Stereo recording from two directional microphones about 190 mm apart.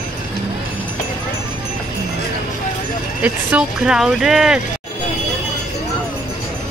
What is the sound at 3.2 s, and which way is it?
Speech, 5° right (ahead or behind).